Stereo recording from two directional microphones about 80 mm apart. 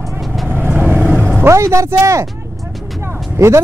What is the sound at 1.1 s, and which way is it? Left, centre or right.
Speech, right.